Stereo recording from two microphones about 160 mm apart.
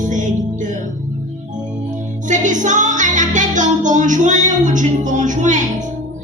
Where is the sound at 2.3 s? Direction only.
50° right (ahead or behind).